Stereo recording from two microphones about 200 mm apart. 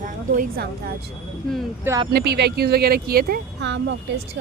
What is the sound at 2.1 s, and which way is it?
Speech, 55° right (ahead or behind).